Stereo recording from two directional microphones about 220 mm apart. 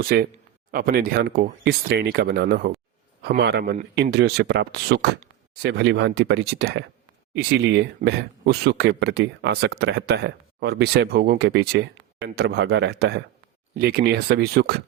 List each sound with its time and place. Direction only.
0.0 s speech: 40° right (ahead or behind)